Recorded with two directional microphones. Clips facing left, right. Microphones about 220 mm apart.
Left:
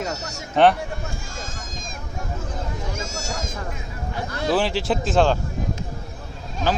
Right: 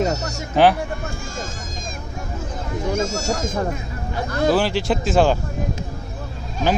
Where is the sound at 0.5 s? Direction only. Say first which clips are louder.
Right 1 dB; 5° right (ahead or behind).